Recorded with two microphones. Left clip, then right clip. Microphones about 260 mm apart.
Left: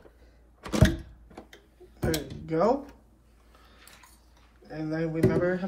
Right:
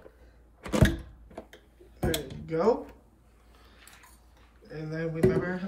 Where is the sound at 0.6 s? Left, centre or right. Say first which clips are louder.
Even; centre.